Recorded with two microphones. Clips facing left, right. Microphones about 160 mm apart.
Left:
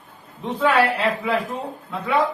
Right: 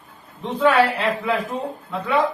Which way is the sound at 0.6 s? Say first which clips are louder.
Right 1 dB; centre (ahead or behind).